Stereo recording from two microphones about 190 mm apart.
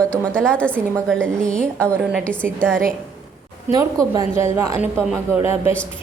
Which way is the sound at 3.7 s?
20° right (ahead or behind).